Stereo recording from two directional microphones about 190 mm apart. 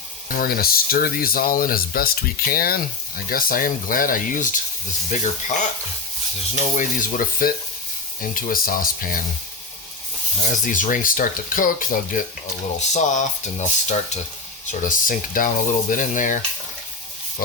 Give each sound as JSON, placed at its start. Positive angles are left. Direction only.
{"t": 0.3, "sound": "speech", "side_deg": 50}
{"t": 6.7, "sound": "speech", "side_deg": 45}
{"t": 10.6, "sound": "speech", "side_deg": 45}